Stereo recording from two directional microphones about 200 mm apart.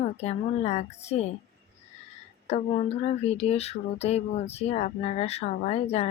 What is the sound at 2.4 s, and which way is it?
Speech, 35° left (ahead or behind).